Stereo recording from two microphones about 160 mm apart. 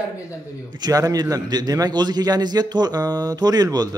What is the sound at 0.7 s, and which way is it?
A man's voice, 25° right (ahead or behind).